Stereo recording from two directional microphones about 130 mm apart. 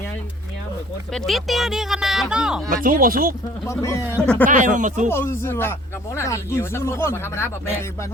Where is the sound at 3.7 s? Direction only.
25° left (ahead or behind).